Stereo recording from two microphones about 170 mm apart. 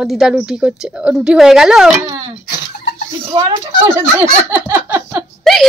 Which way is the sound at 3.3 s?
25° right (ahead or behind).